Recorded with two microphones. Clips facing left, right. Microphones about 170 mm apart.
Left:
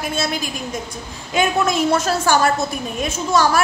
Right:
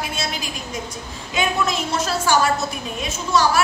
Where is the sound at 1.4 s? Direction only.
45° left (ahead or behind).